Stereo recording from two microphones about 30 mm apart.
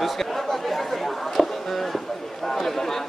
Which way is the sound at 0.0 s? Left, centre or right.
Centre.